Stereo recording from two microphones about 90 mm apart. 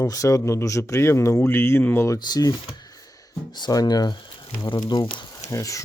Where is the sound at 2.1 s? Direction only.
45° left (ahead or behind).